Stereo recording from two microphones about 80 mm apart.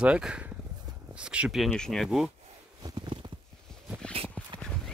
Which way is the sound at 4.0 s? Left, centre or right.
Centre.